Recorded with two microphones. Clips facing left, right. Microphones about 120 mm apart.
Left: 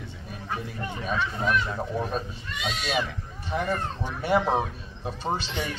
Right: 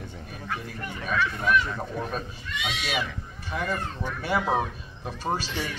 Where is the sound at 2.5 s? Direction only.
40° left (ahead or behind).